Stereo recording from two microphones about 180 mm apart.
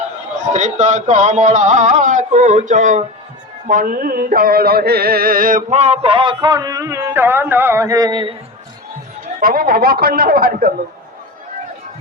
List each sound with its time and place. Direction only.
0.5 s speech: 40° right (ahead or behind)
3.7 s a sound: 50° right (ahead or behind); by 8.4 s 25° right (ahead or behind)
9.4 s speech: 55° right (ahead or behind)